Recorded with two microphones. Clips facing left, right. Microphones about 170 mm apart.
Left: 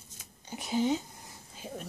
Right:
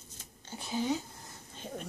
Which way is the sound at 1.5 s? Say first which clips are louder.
Even; 5° left (ahead or behind).